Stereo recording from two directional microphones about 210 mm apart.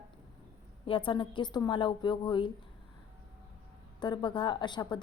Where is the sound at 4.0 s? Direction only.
20° left (ahead or behind).